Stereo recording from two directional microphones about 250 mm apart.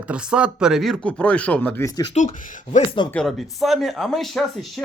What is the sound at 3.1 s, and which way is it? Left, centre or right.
Speech, centre.